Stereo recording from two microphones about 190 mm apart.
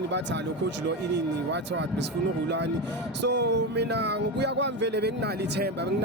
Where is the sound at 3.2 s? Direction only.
65° right (ahead or behind).